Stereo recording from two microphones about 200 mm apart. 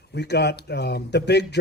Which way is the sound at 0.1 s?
55° left (ahead or behind).